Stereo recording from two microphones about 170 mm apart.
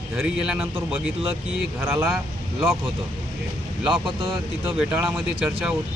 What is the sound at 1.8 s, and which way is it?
Speech, 10° right (ahead or behind).